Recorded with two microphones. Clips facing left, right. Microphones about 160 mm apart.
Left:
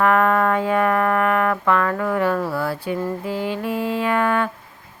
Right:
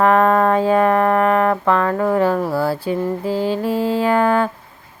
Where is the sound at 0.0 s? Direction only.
30° right (ahead or behind).